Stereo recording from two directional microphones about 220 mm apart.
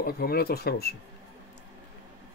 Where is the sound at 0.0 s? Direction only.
45° left (ahead or behind).